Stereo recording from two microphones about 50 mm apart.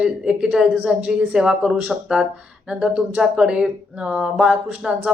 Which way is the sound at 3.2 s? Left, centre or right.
Centre.